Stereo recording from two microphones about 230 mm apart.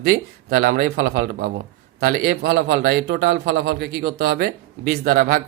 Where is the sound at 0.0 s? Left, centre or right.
Right.